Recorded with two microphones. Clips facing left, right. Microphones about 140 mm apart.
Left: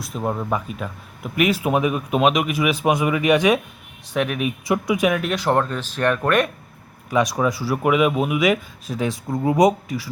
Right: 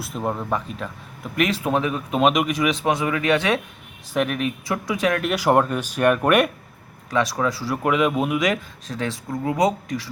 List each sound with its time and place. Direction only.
0.0 s speech: centre (ahead or behind)
4.1 s speech: centre (ahead or behind)
4.6 s speech: 15° left (ahead or behind)
5.2 s speech: 10° right (ahead or behind)
7.1 s speech: 15° left (ahead or behind)